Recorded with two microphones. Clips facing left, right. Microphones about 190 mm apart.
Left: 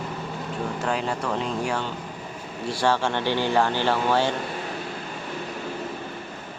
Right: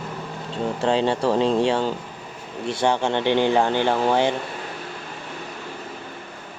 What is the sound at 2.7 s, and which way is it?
Speech, 20° right (ahead or behind).